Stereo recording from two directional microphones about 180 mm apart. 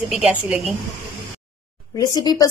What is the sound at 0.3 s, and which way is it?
Speech, 5° right (ahead or behind).